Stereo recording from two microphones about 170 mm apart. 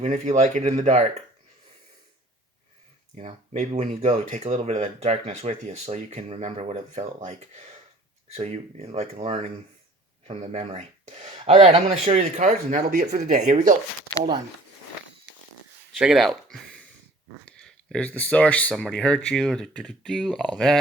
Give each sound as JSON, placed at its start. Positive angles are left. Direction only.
{"t": 0.0, "sound": "speech", "side_deg": -40}
{"t": 3.2, "sound": "speech", "side_deg": -45}
{"t": 16.0, "sound": "speech", "side_deg": -5}